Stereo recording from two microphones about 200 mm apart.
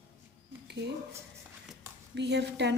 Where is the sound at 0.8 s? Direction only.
55° right (ahead or behind).